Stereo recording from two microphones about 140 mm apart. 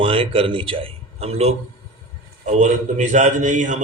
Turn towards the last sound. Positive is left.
turn(degrees=-65)  # may be behind; listen again after turning